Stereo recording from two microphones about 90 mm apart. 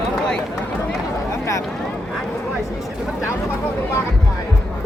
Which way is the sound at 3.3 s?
25° left (ahead or behind).